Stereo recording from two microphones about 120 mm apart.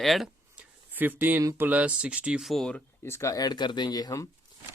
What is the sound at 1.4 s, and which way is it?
Speech, 15° right (ahead or behind).